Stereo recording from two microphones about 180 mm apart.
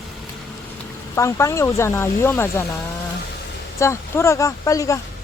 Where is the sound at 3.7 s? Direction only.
15° left (ahead or behind).